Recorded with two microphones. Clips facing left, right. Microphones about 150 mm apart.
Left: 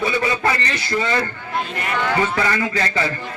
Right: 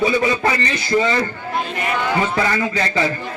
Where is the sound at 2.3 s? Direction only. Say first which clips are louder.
Right 1 dB; 20° right (ahead or behind).